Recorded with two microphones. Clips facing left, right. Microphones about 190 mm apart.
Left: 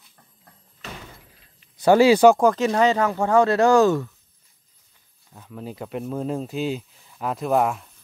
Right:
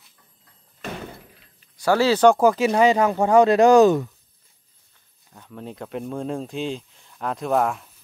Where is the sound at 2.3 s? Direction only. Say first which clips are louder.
Right 1 dB; 5° right (ahead or behind).